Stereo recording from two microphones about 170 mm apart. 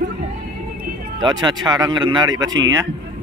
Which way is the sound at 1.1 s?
25° right (ahead or behind).